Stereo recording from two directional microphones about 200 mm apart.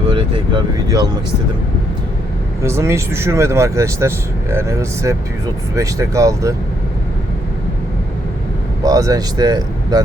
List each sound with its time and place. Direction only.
0.1 s speech: 25° right (ahead or behind)
2.6 s speech: 15° right (ahead or behind)
8.8 s speech: 15° right (ahead or behind)